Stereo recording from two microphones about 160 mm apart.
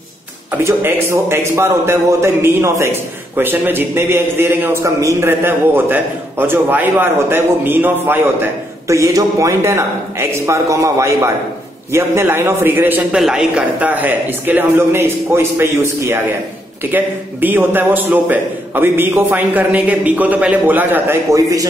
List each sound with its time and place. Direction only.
0.6 s a man's voice: 15° right (ahead or behind)